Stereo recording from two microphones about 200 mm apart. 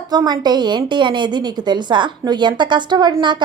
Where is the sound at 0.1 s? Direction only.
20° right (ahead or behind).